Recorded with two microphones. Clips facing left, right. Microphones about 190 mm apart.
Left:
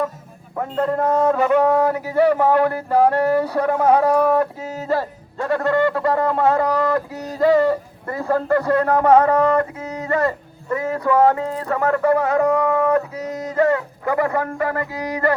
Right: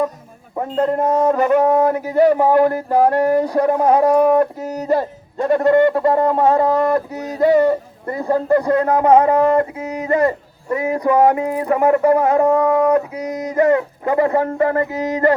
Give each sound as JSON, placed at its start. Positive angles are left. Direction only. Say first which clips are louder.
{"t": 0.5, "sound": "speech", "louder": "right 3 dB", "side_deg": -20}